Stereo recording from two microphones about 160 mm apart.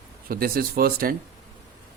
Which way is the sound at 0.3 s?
70° right (ahead or behind).